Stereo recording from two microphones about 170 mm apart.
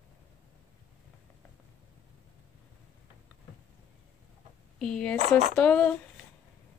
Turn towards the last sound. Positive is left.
turn(degrees=5)  # may be behind; listen again after turning